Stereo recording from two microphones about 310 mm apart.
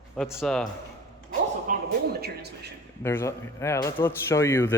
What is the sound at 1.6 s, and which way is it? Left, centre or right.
Music, right.